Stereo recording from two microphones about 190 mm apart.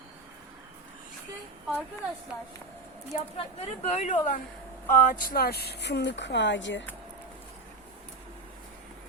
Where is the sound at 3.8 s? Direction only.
35° left (ahead or behind); by 6.8 s 70° left (ahead or behind).